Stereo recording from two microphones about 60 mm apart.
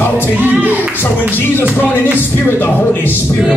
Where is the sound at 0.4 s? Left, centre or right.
Right.